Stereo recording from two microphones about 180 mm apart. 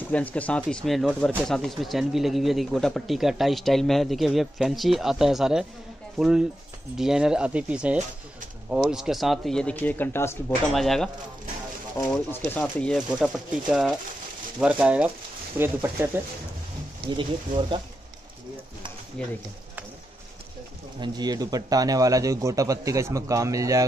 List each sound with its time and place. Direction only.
0.1 s speech: 10° left (ahead or behind)
10.7 s speech: centre (ahead or behind)
12.1 s speech: 10° left (ahead or behind)
12.9 s speech: 5° right (ahead or behind)
17.1 s speech: 25° right (ahead or behind)
19.2 s speech: 5° left (ahead or behind)
21.0 s speech: 20° right (ahead or behind)